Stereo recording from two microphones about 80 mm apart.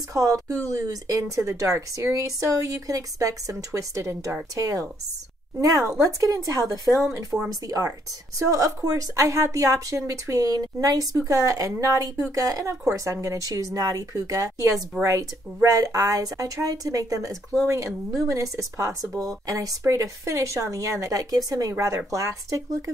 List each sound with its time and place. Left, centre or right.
0.1 s speech: right